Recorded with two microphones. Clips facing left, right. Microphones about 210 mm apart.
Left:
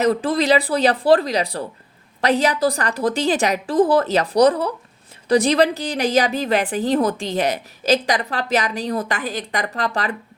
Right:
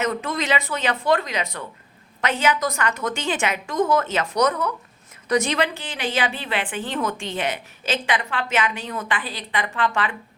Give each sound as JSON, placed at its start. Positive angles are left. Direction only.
{"t": 0.0, "sound": "a woman's voice", "side_deg": 35}